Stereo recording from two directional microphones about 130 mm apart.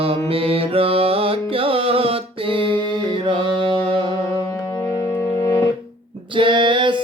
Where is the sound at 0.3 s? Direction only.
45° right (ahead or behind).